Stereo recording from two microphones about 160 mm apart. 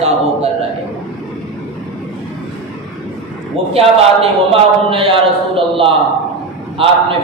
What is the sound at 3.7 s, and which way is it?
A man's voice, 40° right (ahead or behind).